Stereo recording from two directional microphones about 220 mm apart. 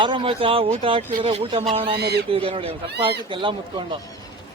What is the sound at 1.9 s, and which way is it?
Speech, 45° right (ahead or behind).